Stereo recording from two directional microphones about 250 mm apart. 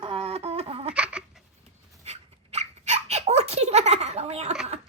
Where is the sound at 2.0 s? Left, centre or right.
Right.